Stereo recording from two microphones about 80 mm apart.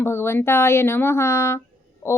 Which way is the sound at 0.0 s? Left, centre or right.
Left.